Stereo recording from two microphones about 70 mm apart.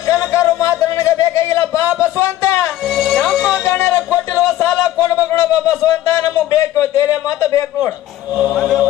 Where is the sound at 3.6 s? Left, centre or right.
Left.